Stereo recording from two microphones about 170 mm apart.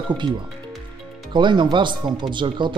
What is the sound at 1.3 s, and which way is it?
A man's voice, 25° right (ahead or behind).